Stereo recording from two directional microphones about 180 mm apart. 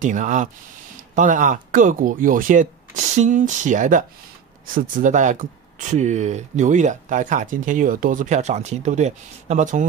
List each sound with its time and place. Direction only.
0.0 s speech: 45° right (ahead or behind)